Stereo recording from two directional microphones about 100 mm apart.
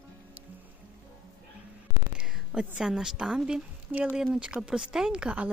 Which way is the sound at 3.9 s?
20° right (ahead or behind).